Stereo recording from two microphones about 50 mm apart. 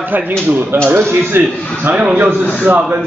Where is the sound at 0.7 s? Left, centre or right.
Right.